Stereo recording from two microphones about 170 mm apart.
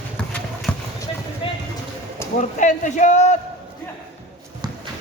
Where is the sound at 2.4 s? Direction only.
45° left (ahead or behind).